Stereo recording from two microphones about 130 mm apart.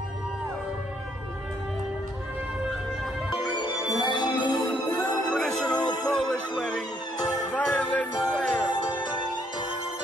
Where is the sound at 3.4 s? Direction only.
35° left (ahead or behind).